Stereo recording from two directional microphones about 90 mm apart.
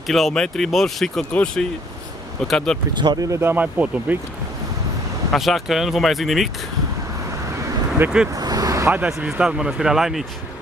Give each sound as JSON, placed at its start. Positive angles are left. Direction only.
{"t": 0.0, "sound": "speech", "side_deg": 0}
{"t": 2.9, "sound": "speech", "side_deg": -55}
{"t": 3.3, "sound": "speech", "side_deg": -25}
{"t": 3.6, "sound": "speech", "side_deg": -15}
{"t": 5.3, "sound": "speech", "side_deg": 0}
{"t": 8.0, "sound": "speech", "side_deg": -25}
{"t": 8.4, "sound": "vehicle", "side_deg": -45}
{"t": 8.9, "sound": "speech", "side_deg": -20}